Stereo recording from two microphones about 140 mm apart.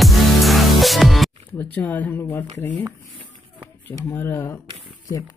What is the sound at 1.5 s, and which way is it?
Speech, 10° left (ahead or behind).